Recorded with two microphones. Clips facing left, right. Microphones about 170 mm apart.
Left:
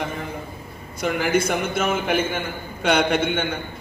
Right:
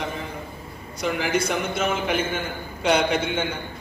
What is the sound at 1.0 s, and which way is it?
A man's voice, 55° left (ahead or behind).